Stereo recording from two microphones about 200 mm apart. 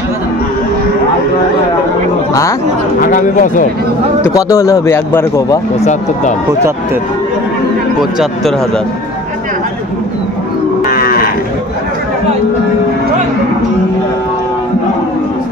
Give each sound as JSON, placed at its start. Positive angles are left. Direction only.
{"t": 3.0, "sound": "speech", "side_deg": 40}
{"t": 4.2, "sound": "speech", "side_deg": 15}
{"t": 8.0, "sound": "speech", "side_deg": 0}
{"t": 10.9, "sound": "livestock", "side_deg": 45}